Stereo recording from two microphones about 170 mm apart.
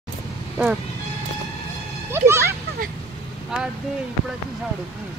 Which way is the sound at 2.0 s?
15° right (ahead or behind).